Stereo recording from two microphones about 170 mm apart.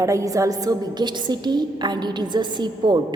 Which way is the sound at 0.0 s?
20° right (ahead or behind).